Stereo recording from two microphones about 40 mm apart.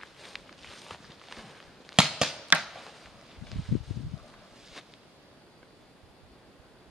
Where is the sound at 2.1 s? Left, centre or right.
Centre.